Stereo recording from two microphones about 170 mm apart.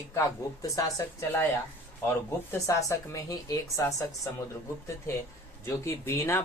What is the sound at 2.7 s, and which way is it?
Speech, 20° left (ahead or behind).